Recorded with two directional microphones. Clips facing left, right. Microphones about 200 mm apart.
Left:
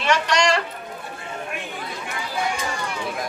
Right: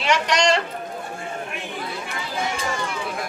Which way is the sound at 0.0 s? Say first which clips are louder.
Even; 20° right (ahead or behind).